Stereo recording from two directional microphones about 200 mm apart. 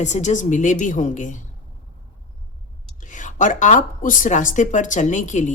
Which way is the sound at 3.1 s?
40° left (ahead or behind).